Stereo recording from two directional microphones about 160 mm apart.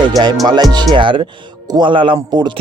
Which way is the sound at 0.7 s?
30° right (ahead or behind).